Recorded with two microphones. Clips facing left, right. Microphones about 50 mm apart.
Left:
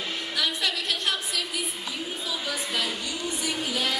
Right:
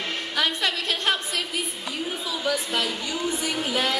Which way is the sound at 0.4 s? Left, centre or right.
Right.